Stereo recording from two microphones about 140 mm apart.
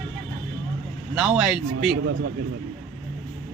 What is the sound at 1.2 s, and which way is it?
Speech, centre (ahead or behind).